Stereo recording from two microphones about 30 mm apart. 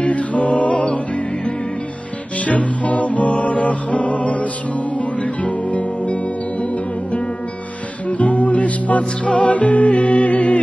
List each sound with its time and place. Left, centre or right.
0.0 s music: left